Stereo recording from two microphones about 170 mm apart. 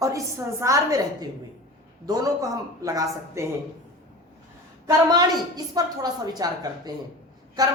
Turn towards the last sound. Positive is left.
turn(degrees=-20)  # may be behind; listen again after turning